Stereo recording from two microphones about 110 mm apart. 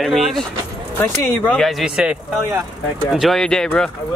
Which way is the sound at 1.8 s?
5° right (ahead or behind).